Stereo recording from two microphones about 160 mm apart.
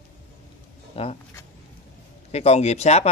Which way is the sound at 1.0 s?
35° left (ahead or behind).